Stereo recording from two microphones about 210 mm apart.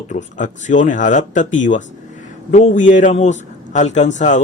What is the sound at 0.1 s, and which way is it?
A man's voice, 35° left (ahead or behind).